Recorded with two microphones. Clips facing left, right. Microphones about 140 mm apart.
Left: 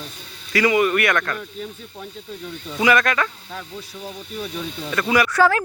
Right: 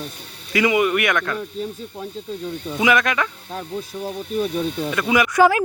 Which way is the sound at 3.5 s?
50° right (ahead or behind).